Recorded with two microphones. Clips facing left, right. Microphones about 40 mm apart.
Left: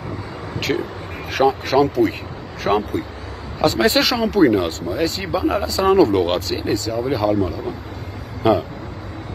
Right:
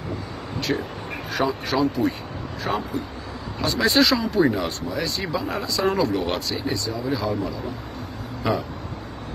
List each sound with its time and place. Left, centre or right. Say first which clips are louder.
0.7 s speech: left 4 dB; centre
1.3 s speech: left 7 dB; left
3.6 s speech: left 3 dB; left
4.4 s speech: left 8 dB; left
5.2 s speech: left 6 dB; left
5.5 s speech: left 8 dB; left
6.1 s speech: left 6 dB; left